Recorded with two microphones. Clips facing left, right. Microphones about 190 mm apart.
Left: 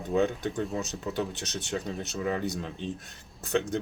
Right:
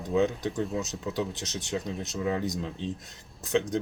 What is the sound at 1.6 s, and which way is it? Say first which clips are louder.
Speech: right 1 dB; centre (ahead or behind).